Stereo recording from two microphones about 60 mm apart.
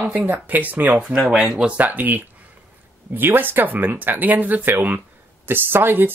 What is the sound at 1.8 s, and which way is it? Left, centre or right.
Speech, right.